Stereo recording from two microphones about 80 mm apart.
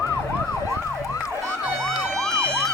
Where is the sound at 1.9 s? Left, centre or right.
Centre.